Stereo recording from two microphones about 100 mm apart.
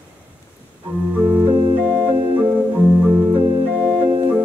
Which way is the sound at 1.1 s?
15° right (ahead or behind).